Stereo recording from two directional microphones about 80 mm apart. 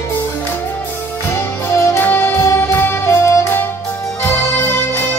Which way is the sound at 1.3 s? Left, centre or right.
Left.